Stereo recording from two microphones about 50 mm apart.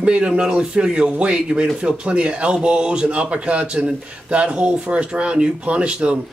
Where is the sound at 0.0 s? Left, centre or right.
Right.